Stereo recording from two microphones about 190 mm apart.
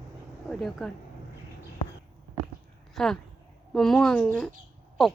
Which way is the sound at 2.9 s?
Centre (ahead or behind).